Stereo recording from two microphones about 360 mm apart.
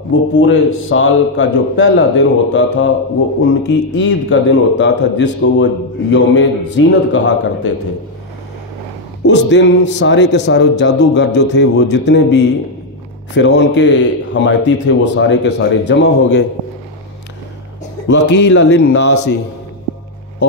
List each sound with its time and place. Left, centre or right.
0.1 s a man's voice: left
3.9 s a man's voice: left
9.2 s a man's voice: left
18.0 s a man's voice: left